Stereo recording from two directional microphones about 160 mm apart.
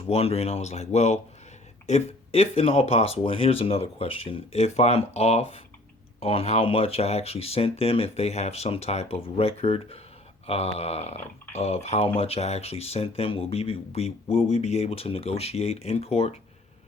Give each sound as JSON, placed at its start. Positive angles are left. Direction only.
{"t": 0.1, "sound": "speech", "side_deg": 40}